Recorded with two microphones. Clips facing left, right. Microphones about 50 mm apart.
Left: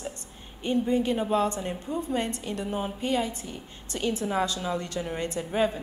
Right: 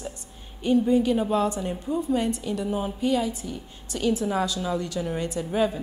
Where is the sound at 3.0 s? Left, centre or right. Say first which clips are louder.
Right 4 dB; left.